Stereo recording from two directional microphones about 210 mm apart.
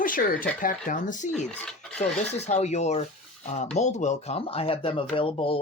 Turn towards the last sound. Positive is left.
turn(degrees=25)  # may be behind; listen again after turning